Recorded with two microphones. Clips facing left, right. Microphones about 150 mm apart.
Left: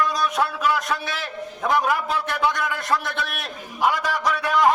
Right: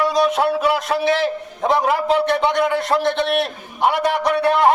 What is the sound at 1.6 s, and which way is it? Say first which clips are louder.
A man's voice: right 5 dB; 30° right (ahead or behind).